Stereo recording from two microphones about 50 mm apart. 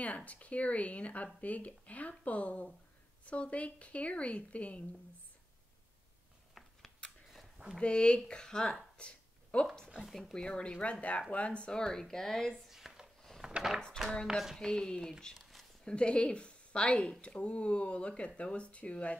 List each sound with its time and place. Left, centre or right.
0.0 s speech: left
6.6 s a sound: centre
7.8 s speech: centre
8.9 s a sound: left
9.8 s speech: centre
10.3 s speech: centre
11.8 s speech: centre
12.6 s a sound: centre
14.3 s speech: centre
14.6 s a woman's voice: centre